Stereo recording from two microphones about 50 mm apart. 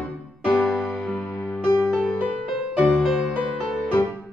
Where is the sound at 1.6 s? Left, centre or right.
Centre.